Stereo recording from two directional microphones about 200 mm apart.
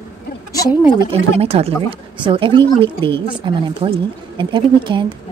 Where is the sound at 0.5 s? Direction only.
20° left (ahead or behind).